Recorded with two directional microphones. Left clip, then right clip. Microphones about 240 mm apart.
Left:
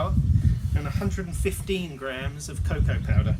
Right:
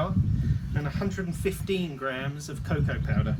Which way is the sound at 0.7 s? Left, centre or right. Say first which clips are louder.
Right 1 dB; centre.